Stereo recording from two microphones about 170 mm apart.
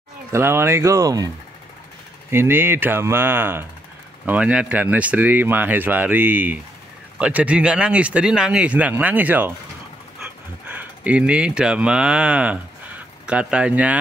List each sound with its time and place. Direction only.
0.3 s speech: 15° right (ahead or behind)
2.3 s speech: 15° right (ahead or behind)
10.7 s speech: 10° right (ahead or behind)